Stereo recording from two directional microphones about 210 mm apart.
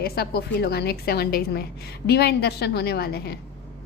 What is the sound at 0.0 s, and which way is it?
A woman's voice, 50° left (ahead or behind).